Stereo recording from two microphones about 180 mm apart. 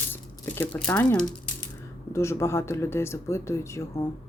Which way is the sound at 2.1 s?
15° left (ahead or behind).